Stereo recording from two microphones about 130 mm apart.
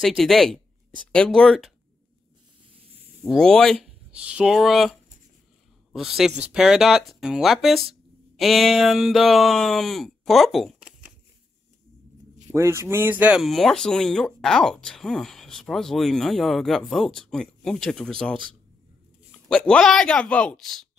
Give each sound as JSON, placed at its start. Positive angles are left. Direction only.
{"t": 0.0, "sound": "speech", "side_deg": 0}
{"t": 3.3, "sound": "speech", "side_deg": 5}
{"t": 4.1, "sound": "speech", "side_deg": -10}
{"t": 5.9, "sound": "speech", "side_deg": -5}
{"t": 8.4, "sound": "a sound", "side_deg": 0}
{"t": 12.5, "sound": "speech", "side_deg": -20}
{"t": 19.5, "sound": "a man's voice", "side_deg": 10}